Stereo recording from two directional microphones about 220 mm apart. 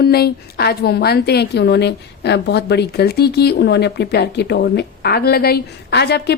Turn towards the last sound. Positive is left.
turn(degrees=50)  # may be behind; listen again after turning